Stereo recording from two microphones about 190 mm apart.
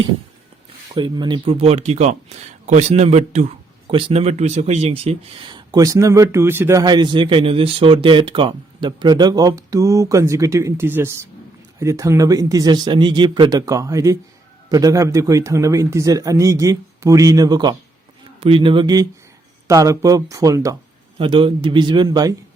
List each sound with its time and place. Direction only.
0.9 s speech: 25° right (ahead or behind)
21.2 s speech: 25° right (ahead or behind)